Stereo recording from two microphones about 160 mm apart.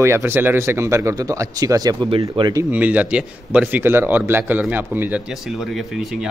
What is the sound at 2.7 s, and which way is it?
A man's voice, 10° right (ahead or behind).